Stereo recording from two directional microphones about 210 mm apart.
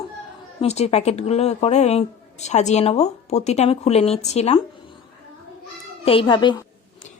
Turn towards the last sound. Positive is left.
turn(degrees=20)  # may be behind; listen again after turning